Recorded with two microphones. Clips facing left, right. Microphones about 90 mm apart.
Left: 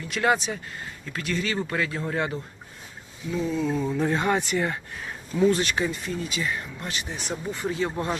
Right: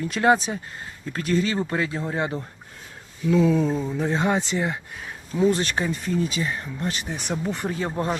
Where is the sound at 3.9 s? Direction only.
15° right (ahead or behind).